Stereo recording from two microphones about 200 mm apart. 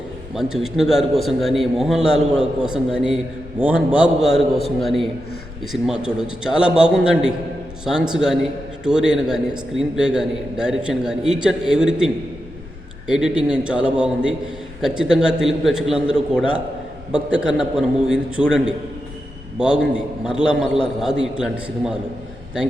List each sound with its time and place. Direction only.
0.5 s a man's voice: centre (ahead or behind)